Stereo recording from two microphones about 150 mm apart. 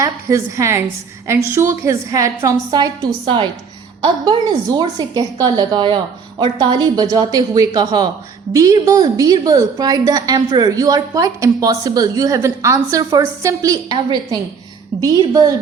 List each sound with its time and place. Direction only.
0.0 s a woman's voice: 20° right (ahead or behind)